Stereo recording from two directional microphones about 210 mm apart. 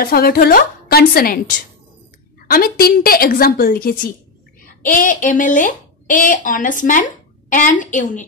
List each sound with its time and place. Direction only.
0.0 s a woman's voice: 45° left (ahead or behind)
2.4 s a woman's voice: 45° left (ahead or behind)